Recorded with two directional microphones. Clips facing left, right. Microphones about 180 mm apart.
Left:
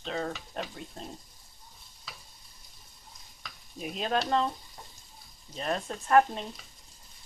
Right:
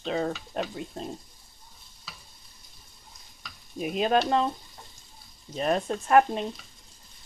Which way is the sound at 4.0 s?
15° right (ahead or behind).